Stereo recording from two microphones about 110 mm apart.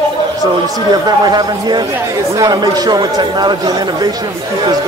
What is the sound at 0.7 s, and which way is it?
Speech, 35° right (ahead or behind).